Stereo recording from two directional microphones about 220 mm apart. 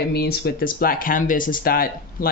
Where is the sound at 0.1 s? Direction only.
45° left (ahead or behind).